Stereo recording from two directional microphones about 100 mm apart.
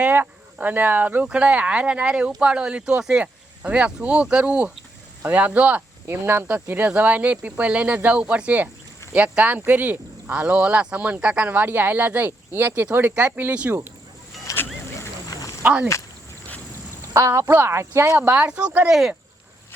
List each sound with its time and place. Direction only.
0.0 s speech: 20° right (ahead or behind)
15.3 s snake: 35° left (ahead or behind)
15.6 s speech: 10° right (ahead or behind)
17.2 s speech: 30° right (ahead or behind)
18.2 s speech: 10° right (ahead or behind)